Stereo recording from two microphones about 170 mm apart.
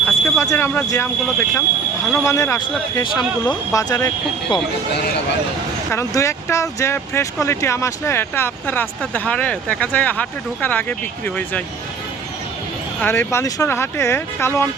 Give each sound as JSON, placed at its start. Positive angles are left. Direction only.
{"t": 0.0, "sound": "smoke detector", "side_deg": 10}
{"t": 0.4, "sound": "speech", "side_deg": 15}
{"t": 5.9, "sound": "speech", "side_deg": 15}
{"t": 13.0, "sound": "speech", "side_deg": 15}